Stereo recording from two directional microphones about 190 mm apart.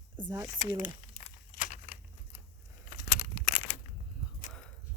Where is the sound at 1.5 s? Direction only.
45° left (ahead or behind).